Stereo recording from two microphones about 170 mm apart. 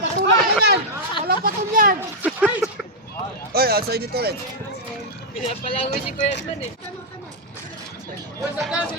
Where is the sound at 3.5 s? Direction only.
65° right (ahead or behind).